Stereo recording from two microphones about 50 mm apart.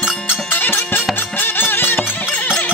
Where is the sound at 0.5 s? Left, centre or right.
Left.